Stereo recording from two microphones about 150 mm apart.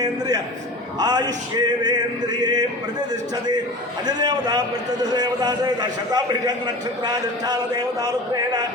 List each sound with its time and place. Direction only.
0.9 s male singing: 25° right (ahead or behind)
4.0 s male singing: 25° right (ahead or behind)